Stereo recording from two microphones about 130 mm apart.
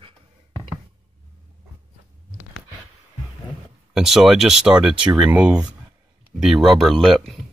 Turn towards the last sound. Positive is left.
turn(degrees=0)  # may be behind; listen again after turning